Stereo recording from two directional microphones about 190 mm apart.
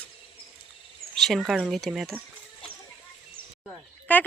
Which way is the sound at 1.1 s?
Centre (ahead or behind).